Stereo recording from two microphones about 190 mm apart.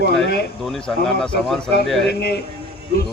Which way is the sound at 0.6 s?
Centre (ahead or behind).